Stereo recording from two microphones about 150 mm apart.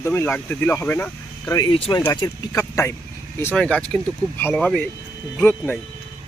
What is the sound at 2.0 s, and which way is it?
Speech, 20° left (ahead or behind).